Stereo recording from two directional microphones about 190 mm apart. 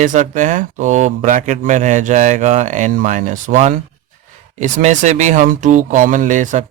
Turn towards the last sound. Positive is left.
turn(degrees=-40)  # may be behind; listen again after turning